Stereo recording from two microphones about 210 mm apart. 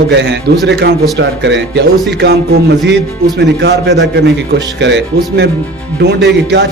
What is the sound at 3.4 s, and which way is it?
Speech, 55° right (ahead or behind).